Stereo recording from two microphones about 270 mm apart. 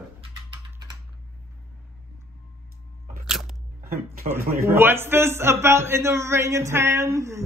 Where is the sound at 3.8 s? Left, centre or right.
Right.